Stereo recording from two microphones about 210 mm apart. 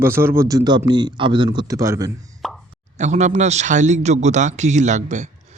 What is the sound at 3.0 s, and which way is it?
Speech, 35° right (ahead or behind).